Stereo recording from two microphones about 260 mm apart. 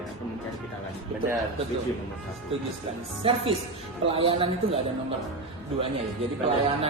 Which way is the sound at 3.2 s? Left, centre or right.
Right.